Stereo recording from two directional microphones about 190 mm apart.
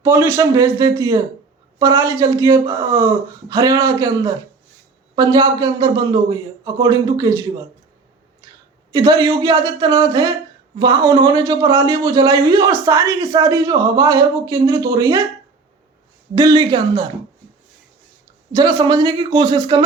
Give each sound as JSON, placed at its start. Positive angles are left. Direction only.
{"t": 0.0, "sound": "a man's voice", "side_deg": -15}
{"t": 8.9, "sound": "a man's voice", "side_deg": -20}
{"t": 16.3, "sound": "a man's voice", "side_deg": -20}
{"t": 18.5, "sound": "a man's voice", "side_deg": -20}